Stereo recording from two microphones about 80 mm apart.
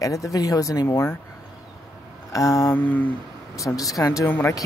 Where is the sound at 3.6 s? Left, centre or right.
Left.